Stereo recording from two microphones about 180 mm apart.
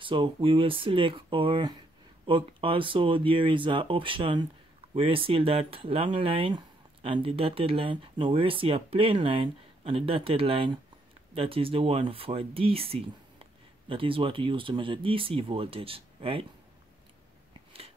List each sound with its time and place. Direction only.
0.0 s speech: 30° right (ahead or behind)